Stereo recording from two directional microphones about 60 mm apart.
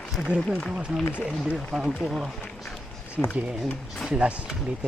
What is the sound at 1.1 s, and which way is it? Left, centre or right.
Speech, right.